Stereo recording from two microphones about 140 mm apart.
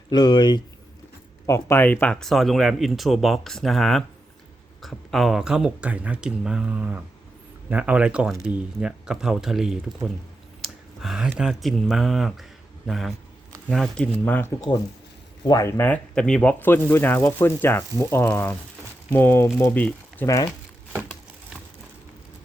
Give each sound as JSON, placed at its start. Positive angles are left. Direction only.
{"t": 0.1, "sound": "speech", "side_deg": 30}
{"t": 1.5, "sound": "speech", "side_deg": 20}